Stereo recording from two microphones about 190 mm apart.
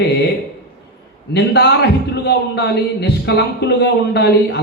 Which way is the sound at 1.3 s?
60° left (ahead or behind).